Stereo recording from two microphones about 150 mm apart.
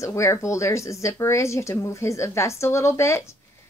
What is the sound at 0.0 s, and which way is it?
A woman's voice, 20° left (ahead or behind).